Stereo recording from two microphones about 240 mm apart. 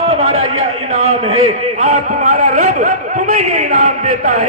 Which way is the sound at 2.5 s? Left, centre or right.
Right.